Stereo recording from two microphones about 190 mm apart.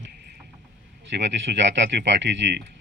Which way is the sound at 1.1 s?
70° right (ahead or behind).